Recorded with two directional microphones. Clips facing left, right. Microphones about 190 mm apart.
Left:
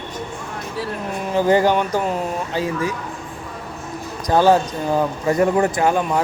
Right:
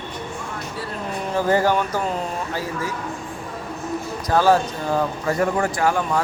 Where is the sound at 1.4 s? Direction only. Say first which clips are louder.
Left 3 dB; 15° left (ahead or behind).